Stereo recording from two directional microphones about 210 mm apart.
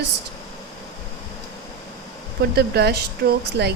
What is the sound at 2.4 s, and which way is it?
Speech, 50° right (ahead or behind).